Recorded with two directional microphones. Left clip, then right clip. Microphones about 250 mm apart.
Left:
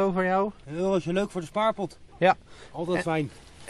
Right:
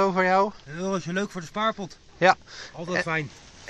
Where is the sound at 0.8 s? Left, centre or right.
Left.